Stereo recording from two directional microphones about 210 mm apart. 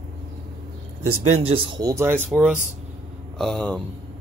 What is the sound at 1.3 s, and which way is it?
Speech, 25° right (ahead or behind).